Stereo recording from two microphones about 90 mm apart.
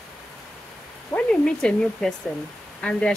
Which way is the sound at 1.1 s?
10° left (ahead or behind).